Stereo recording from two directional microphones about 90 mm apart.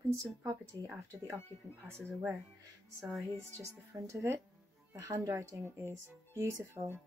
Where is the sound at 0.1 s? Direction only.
35° right (ahead or behind).